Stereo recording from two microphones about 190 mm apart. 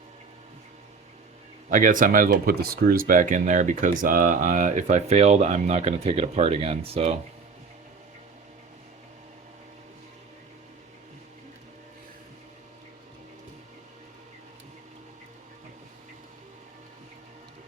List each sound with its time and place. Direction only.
1.7 s speech: 45° right (ahead or behind)